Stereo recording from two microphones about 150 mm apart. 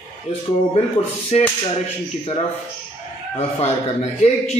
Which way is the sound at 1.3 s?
45° left (ahead or behind).